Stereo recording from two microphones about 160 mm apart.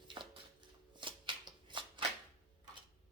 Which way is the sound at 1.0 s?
30° right (ahead or behind).